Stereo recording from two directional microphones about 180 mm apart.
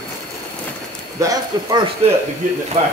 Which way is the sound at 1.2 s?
20° right (ahead or behind).